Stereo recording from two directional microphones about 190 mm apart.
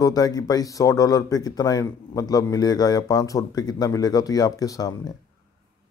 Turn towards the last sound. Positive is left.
turn(degrees=20)  # may be behind; listen again after turning